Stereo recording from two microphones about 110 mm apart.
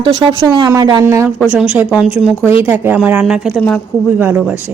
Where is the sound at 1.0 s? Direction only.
25° right (ahead or behind).